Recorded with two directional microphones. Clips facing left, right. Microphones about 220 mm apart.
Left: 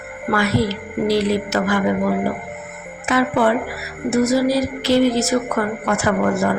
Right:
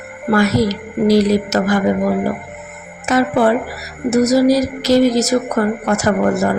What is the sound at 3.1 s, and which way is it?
A woman's voice, 40° right (ahead or behind).